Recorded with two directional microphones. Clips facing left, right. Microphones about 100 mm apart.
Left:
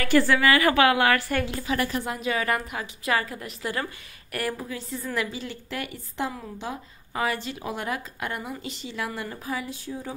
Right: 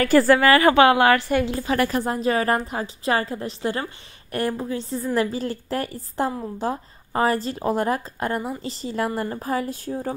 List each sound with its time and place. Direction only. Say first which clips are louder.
0.0 s speech: right 5 dB; 40° right (ahead or behind)
0.7 s a woman's voice: right 6 dB; 30° right (ahead or behind)
1.8 s speech: right 6 dB; 45° right (ahead or behind)